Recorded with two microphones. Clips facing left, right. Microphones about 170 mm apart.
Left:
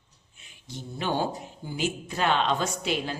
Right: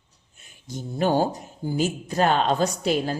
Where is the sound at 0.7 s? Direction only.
45° right (ahead or behind).